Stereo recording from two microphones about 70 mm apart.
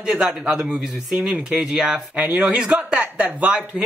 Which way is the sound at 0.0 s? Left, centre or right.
Centre.